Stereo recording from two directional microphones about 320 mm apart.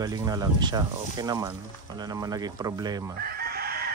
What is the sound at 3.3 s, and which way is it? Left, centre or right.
Chicken, right.